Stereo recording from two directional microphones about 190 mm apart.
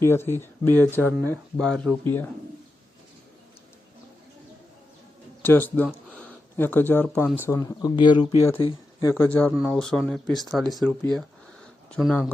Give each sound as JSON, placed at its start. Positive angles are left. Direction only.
{"t": 0.0, "sound": "speech", "side_deg": 10}
{"t": 5.4, "sound": "speech", "side_deg": 10}
{"t": 7.4, "sound": "speech", "side_deg": 20}